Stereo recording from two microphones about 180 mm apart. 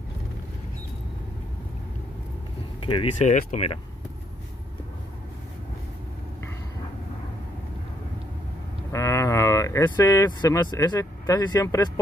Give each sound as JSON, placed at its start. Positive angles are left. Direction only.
{"t": 2.8, "sound": "speech", "side_deg": 30}
{"t": 3.3, "sound": "speech", "side_deg": 45}
{"t": 8.9, "sound": "speech", "side_deg": 15}